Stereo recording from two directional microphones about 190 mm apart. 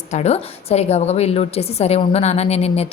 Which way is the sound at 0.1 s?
35° left (ahead or behind).